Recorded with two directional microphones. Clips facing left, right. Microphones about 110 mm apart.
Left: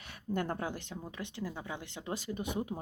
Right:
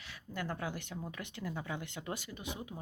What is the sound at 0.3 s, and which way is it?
Speech, 35° left (ahead or behind).